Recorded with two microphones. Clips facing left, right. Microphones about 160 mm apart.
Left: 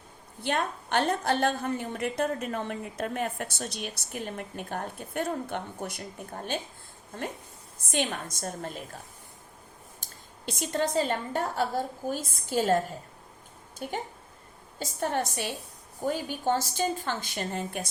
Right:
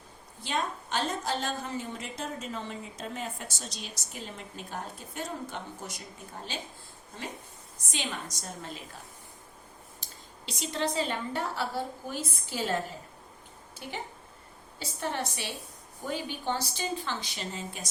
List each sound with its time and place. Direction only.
0.4 s a woman's voice: 60° left (ahead or behind)
7.8 s a woman's voice: 55° left (ahead or behind)
10.0 s a woman's voice: 50° left (ahead or behind)
13.8 s a woman's voice: 45° left (ahead or behind)